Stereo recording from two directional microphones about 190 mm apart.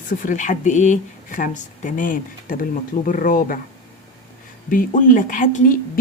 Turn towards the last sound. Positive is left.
turn(degrees=45)  # may be behind; listen again after turning